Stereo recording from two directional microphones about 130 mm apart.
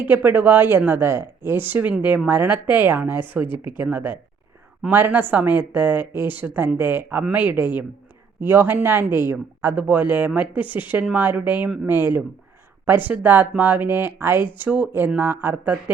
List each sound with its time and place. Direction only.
0.0 s speech: 15° right (ahead or behind)